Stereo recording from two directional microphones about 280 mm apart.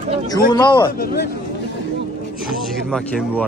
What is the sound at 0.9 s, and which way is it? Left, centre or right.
Speech, left.